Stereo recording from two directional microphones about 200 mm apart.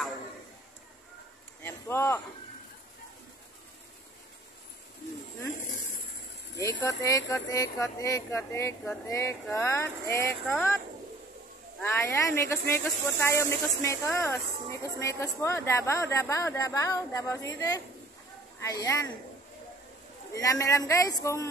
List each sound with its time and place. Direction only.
1.6 s a sound: 10° left (ahead or behind)
6.5 s speech: 15° left (ahead or behind)
11.8 s speech: 10° left (ahead or behind)
20.3 s speech: 15° left (ahead or behind)